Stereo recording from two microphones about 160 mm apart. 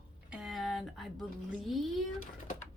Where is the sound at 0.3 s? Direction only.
5° right (ahead or behind).